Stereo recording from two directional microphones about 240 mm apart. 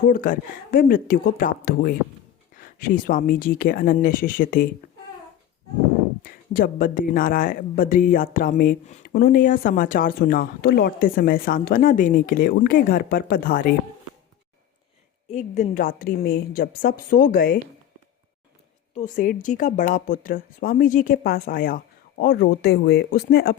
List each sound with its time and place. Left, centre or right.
0.0 s speech: left
6.2 s speech: left
15.3 s speech: left
18.9 s speech: left